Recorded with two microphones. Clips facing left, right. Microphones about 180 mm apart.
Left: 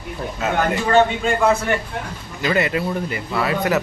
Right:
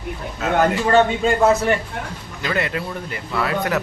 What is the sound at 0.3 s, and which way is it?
Speech, centre (ahead or behind).